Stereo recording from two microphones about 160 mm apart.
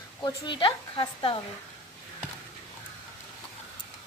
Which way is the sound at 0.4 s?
30° left (ahead or behind).